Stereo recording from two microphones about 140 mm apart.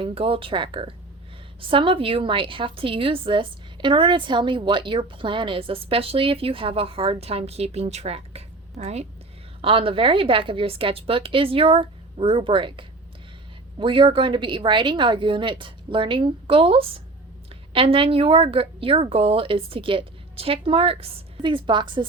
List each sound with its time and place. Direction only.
0.0 s a woman's voice: 40° right (ahead or behind)